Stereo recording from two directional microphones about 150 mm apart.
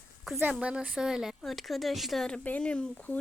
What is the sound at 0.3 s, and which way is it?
Speech, 10° right (ahead or behind).